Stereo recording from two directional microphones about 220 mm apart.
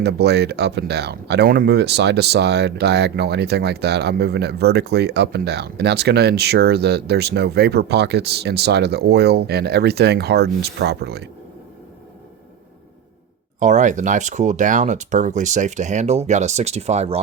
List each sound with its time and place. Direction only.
0.0 s speech: 50° right (ahead or behind)
13.6 s speech: 35° right (ahead or behind)